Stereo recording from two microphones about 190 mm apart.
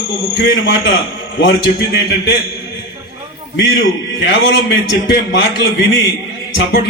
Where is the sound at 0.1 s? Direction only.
65° left (ahead or behind).